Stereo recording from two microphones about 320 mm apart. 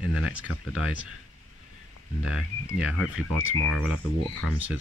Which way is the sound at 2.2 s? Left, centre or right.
Centre.